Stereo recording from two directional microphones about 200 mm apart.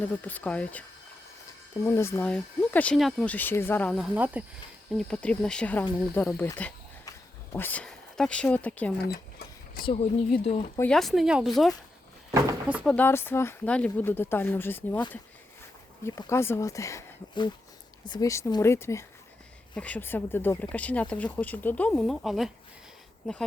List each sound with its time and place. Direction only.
0.0 s speech: 10° left (ahead or behind)
4.1 s speech: 5° right (ahead or behind)
4.9 s speech: 5° left (ahead or behind)
9.8 s speech: 30° left (ahead or behind)
10.8 s speech: 5° left (ahead or behind)
12.3 s speech: 10° right (ahead or behind); by 15.0 s 10° left (ahead or behind)
16.0 s speech: 15° left (ahead or behind)